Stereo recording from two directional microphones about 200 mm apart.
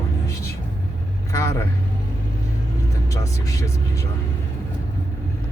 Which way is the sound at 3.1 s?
15° left (ahead or behind).